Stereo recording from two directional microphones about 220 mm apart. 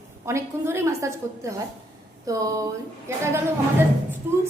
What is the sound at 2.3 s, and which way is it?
A woman's voice, 15° right (ahead or behind).